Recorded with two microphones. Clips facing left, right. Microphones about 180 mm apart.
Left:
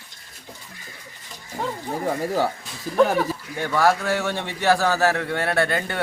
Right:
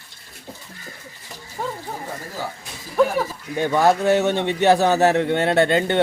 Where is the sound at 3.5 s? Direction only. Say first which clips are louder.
Right 3 dB; 20° right (ahead or behind).